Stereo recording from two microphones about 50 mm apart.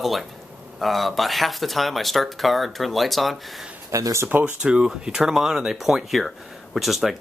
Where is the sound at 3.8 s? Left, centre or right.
Right.